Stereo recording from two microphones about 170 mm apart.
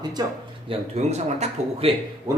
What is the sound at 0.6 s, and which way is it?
Speech, 40° right (ahead or behind).